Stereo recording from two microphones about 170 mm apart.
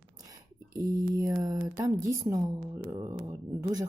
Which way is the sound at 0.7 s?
20° right (ahead or behind).